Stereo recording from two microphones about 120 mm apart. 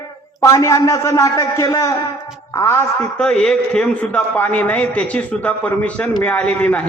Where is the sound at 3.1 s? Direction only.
5° left (ahead or behind).